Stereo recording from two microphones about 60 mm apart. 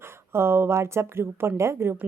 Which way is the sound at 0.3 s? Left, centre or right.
Right.